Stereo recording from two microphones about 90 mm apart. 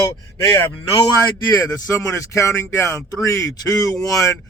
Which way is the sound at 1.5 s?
40° left (ahead or behind).